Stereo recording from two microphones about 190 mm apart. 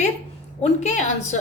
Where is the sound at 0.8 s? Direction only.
40° left (ahead or behind).